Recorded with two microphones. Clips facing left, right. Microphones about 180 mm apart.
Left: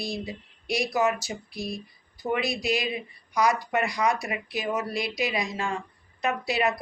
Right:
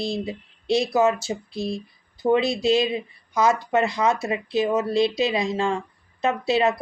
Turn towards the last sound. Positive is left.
turn(degrees=-25)  # may be behind; listen again after turning